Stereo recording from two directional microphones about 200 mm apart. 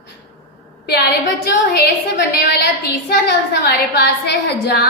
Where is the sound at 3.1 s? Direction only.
55° left (ahead or behind).